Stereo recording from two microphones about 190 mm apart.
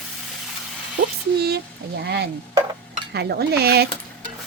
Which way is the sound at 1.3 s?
55° right (ahead or behind).